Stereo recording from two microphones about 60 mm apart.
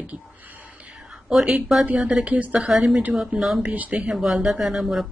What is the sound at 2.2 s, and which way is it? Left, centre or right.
Speech, right.